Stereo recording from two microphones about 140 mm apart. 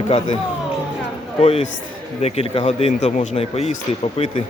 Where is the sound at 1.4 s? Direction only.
45° left (ahead or behind).